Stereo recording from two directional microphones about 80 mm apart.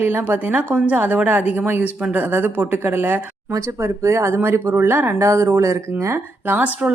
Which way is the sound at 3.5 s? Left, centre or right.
Right.